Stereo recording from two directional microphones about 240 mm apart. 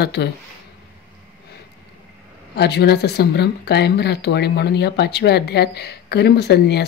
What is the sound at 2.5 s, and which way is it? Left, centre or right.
Speech, left.